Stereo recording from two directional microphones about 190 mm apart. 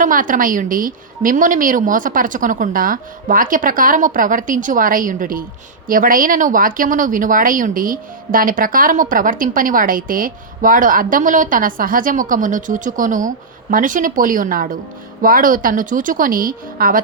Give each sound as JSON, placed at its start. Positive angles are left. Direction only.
{"t": 0.0, "sound": "speech", "side_deg": -45}